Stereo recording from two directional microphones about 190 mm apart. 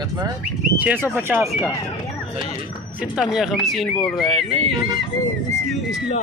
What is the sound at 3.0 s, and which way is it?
Speech, 5° right (ahead or behind).